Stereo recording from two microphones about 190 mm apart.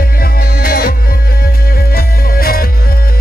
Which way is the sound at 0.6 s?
50° left (ahead or behind).